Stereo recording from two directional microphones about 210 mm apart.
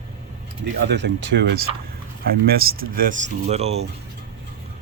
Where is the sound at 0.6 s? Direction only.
55° right (ahead or behind).